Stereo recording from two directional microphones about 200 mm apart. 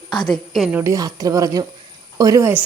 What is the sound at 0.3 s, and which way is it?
A woman's voice, centre (ahead or behind).